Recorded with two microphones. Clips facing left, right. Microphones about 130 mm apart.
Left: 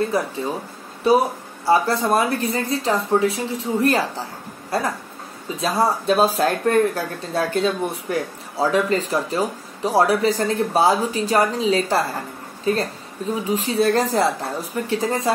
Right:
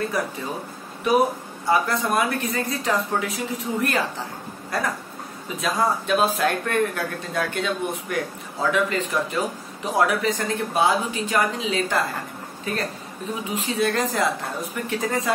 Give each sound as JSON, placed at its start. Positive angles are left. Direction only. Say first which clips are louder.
{"t": 0.2, "sound": "speech", "louder": "left 4 dB", "side_deg": 30}